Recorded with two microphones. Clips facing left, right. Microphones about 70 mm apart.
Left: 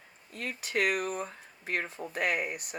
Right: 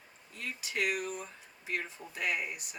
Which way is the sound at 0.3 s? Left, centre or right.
Left.